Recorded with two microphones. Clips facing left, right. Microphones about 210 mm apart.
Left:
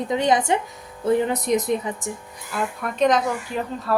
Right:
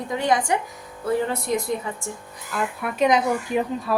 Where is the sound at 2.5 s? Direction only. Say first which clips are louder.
Even; 5° right (ahead or behind).